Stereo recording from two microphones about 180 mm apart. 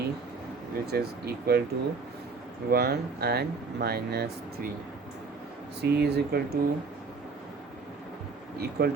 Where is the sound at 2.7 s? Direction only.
60° right (ahead or behind).